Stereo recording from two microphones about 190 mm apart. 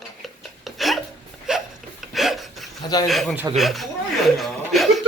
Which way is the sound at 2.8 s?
20° left (ahead or behind).